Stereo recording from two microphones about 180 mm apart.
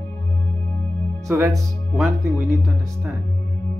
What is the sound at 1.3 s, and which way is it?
Speech, 10° right (ahead or behind).